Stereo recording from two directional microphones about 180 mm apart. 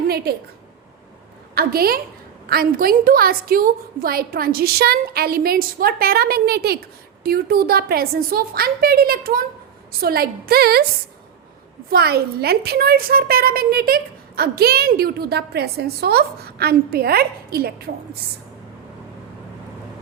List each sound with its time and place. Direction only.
0.3 s a woman's voice: 60° right (ahead or behind)
1.5 s a woman's voice: 55° right (ahead or behind)
11.9 s a woman's voice: 60° right (ahead or behind)